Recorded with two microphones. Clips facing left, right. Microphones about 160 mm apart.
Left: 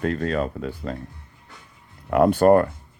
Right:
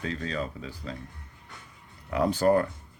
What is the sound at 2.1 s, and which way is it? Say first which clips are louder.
Speech: left 7 dB; 55° left (ahead or behind).